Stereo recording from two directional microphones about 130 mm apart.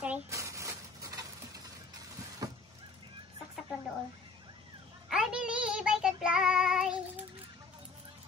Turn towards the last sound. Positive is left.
turn(degrees=-5)  # may be behind; listen again after turning